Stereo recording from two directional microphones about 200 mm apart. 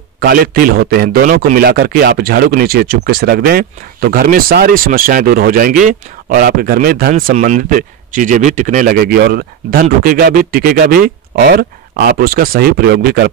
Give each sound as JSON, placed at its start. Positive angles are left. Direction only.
{"t": 0.2, "sound": "a man's voice", "side_deg": -45}